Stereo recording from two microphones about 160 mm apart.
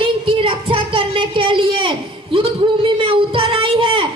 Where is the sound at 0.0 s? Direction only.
35° right (ahead or behind).